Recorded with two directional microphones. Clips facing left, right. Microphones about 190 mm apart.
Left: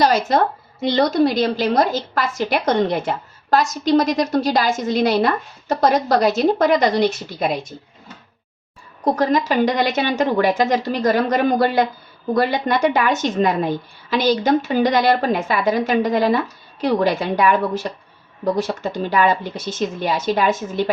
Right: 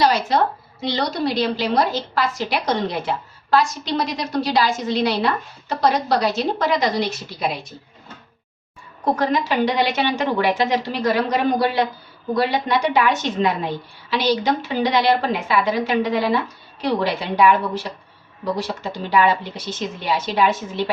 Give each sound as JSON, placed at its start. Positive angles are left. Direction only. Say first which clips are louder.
{"t": 0.0, "sound": "a woman's voice", "louder": "left 2 dB", "side_deg": 45}
{"t": 9.1, "sound": "a woman's voice", "louder": "left 3 dB", "side_deg": 45}